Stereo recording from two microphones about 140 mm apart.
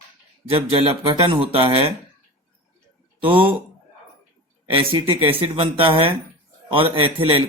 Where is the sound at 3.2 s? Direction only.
40° right (ahead or behind).